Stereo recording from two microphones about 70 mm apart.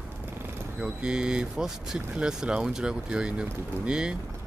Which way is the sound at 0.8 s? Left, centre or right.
Centre.